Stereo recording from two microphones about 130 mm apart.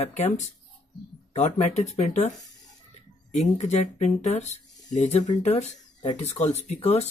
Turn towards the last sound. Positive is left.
turn(degrees=55)  # may be behind; listen again after turning